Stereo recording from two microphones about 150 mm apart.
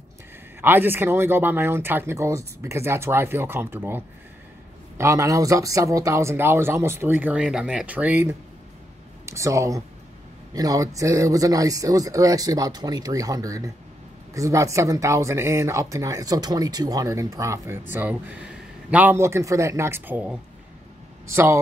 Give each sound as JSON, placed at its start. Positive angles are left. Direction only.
{"t": 0.6, "sound": "speech", "side_deg": -15}